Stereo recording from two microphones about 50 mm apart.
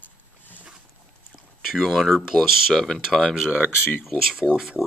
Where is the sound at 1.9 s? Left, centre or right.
Centre.